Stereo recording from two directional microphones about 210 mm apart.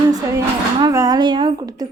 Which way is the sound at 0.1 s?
20° right (ahead or behind).